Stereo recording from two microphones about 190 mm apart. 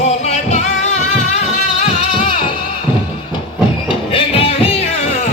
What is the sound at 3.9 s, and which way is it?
Music, 30° left (ahead or behind).